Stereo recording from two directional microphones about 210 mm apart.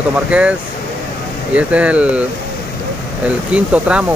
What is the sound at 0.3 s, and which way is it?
Speech, 5° right (ahead or behind).